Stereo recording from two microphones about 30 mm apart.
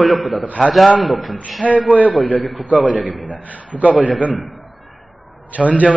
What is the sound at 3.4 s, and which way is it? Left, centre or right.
Speech, left.